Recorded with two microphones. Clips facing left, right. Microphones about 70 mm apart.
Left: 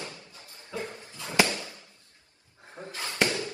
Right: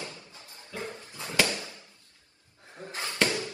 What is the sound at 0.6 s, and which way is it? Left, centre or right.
Dog, left.